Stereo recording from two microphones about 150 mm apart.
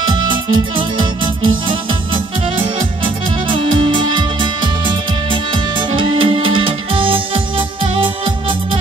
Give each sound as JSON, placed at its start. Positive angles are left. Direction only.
{"t": 0.1, "sound": "music", "side_deg": -30}
{"t": 3.0, "sound": "music", "side_deg": -35}